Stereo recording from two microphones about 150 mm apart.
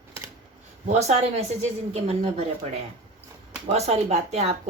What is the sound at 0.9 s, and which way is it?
A woman's voice, 45° right (ahead or behind).